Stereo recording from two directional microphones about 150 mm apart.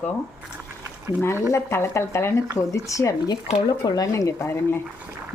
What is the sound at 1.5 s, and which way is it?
Speech, 15° left (ahead or behind).